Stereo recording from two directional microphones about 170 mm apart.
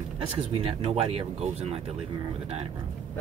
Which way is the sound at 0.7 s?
35° right (ahead or behind).